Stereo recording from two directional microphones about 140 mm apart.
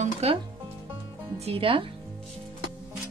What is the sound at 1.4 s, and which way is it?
Speech, 40° right (ahead or behind).